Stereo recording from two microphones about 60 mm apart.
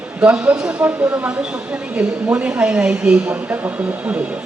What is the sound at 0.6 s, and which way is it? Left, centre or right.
Speech, right.